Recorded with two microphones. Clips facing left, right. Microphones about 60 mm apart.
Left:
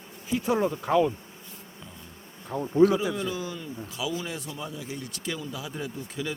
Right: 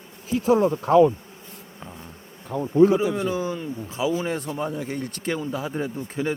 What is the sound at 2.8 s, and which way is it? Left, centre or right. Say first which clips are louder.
A man's voice: right 3 dB; right.